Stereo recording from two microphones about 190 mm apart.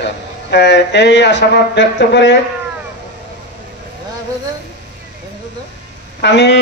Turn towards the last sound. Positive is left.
turn(degrees=65)  # may be behind; listen again after turning